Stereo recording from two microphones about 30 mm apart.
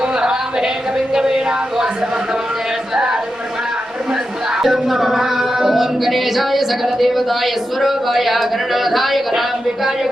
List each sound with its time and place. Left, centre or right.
1.1 s speech: right
2.9 s speech: right
4.6 s speech: centre